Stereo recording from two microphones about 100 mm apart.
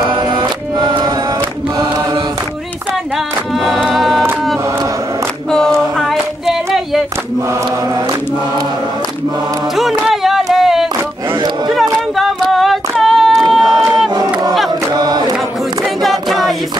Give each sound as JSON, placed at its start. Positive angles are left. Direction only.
{"t": 0.1, "sound": "music", "side_deg": -55}
{"t": 3.5, "sound": "music", "side_deg": 5}
{"t": 5.9, "sound": "a sound", "side_deg": 0}
{"t": 9.8, "sound": "a sound", "side_deg": -5}
{"t": 12.2, "sound": "a capella", "side_deg": 0}
{"t": 13.5, "sound": "crowd", "side_deg": 0}
{"t": 14.1, "sound": "a sound", "side_deg": -40}
{"t": 15.0, "sound": "mantra", "side_deg": -40}
{"t": 15.8, "sound": "a capella", "side_deg": 0}